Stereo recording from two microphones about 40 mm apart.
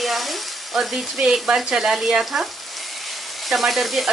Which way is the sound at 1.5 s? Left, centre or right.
Centre.